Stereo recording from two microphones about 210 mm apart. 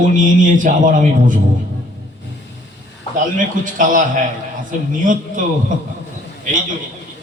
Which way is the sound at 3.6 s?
40° right (ahead or behind).